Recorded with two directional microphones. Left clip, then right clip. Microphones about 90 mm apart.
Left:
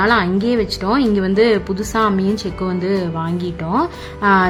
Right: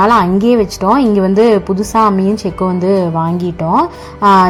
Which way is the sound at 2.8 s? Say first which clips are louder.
Right 7 dB; 40° right (ahead or behind).